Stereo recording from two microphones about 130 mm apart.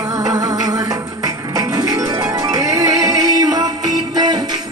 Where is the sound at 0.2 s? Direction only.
30° right (ahead or behind).